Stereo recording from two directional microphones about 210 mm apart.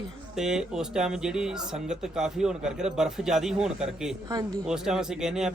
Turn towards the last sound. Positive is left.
turn(degrees=-5)  # may be behind; listen again after turning